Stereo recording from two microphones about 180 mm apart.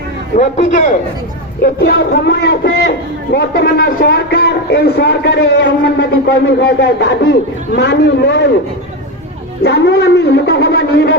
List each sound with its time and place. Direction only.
0.3 s a man's voice: 40° left (ahead or behind)
1.6 s speech: 60° left (ahead or behind)
9.6 s speech: 70° left (ahead or behind)